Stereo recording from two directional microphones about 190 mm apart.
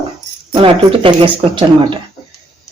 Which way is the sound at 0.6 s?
30° right (ahead or behind).